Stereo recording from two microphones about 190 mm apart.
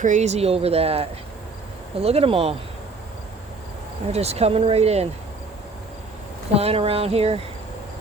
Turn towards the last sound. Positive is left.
turn(degrees=-30)  # may be behind; listen again after turning